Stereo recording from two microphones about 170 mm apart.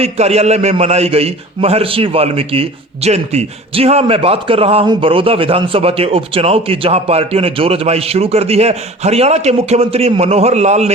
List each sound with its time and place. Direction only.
0.0 s a man's voice: 40° right (ahead or behind)